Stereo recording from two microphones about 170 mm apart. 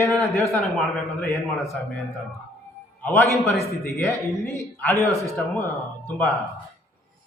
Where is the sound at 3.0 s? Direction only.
10° left (ahead or behind).